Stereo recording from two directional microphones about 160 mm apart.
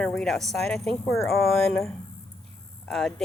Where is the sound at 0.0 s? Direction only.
5° left (ahead or behind).